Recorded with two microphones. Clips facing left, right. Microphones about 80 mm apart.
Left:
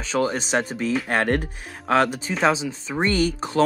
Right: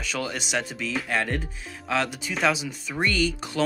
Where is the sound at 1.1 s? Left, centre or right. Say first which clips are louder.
Left 4 dB; left.